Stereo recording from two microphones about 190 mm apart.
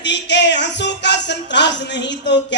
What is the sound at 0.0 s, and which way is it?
Music, 65° left (ahead or behind).